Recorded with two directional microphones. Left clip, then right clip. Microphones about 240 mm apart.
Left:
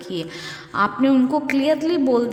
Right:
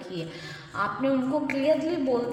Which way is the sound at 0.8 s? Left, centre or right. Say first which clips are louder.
Left 8 dB; left.